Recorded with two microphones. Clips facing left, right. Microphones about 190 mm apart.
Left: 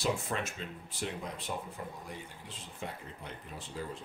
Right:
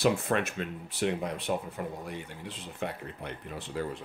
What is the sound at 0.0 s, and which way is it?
Speech, 65° right (ahead or behind).